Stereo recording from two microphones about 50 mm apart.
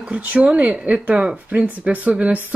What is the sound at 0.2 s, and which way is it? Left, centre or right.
A woman's voice, right.